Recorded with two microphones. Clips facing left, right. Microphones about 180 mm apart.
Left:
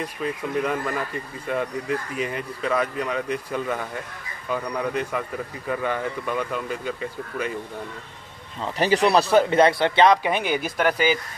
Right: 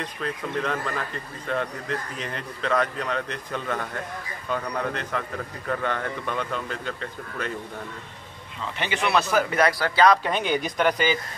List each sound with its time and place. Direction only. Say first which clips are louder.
0.0 s speech: left 3 dB; 10° left (ahead or behind)
8.7 s speech: left 6 dB; 35° left (ahead or behind)
10.3 s speech: left 1 dB; 10° left (ahead or behind)